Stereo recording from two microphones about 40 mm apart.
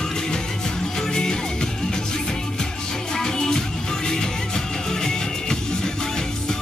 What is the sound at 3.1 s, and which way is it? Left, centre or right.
Music, centre.